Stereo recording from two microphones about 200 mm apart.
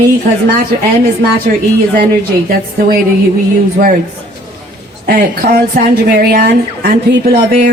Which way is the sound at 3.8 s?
45° right (ahead or behind).